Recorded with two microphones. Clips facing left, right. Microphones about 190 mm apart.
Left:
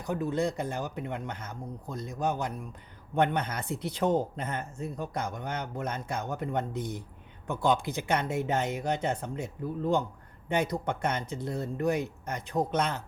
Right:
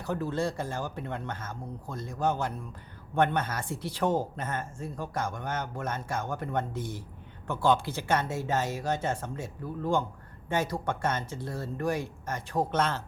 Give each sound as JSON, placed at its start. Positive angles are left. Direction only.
{"t": 0.0, "sound": "speech", "side_deg": 15}